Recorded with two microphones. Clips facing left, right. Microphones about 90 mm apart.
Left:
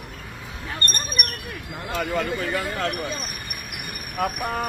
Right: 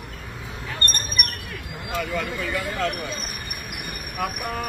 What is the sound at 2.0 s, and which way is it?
Speech, 50° left (ahead or behind).